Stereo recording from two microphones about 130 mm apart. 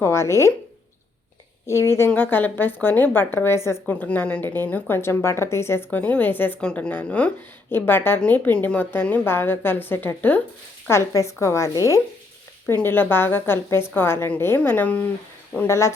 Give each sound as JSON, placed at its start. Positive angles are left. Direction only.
{"t": 0.0, "sound": "a woman's voice", "side_deg": 20}
{"t": 1.6, "sound": "a woman's voice", "side_deg": 20}
{"t": 12.8, "sound": "a woman's voice", "side_deg": 15}